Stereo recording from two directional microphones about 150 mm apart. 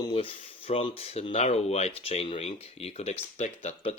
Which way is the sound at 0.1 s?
40° left (ahead or behind).